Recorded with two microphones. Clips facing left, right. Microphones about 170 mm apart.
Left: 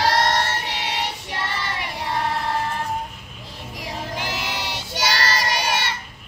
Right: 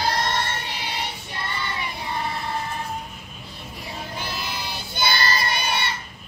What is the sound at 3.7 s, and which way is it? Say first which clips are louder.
Child singing: left 4 dB; 90° left.